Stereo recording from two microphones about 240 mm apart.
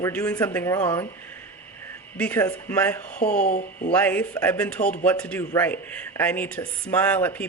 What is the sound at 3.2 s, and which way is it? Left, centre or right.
Speech, left.